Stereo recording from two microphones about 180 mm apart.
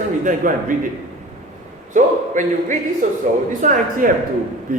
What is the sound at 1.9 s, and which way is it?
Speech, 45° right (ahead or behind).